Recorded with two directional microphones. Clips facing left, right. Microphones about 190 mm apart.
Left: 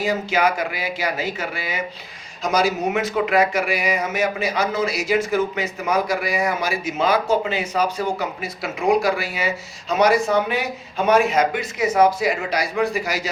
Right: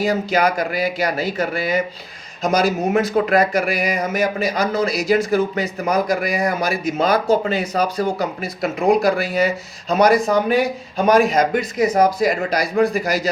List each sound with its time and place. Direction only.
0.0 s speech: 35° right (ahead or behind)